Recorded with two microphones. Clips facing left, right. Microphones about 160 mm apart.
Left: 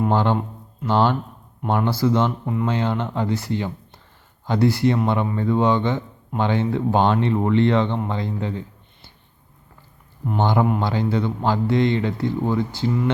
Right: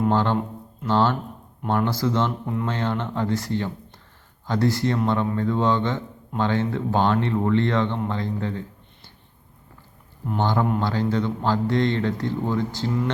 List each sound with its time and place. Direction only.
0.1 s a man's voice: 15° left (ahead or behind)
10.3 s a man's voice: 15° left (ahead or behind)